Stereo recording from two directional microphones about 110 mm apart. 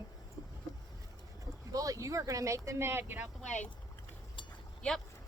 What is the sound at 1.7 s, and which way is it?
Speech, 30° right (ahead or behind).